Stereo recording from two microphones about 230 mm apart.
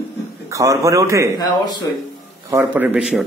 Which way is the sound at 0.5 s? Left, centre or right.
Centre.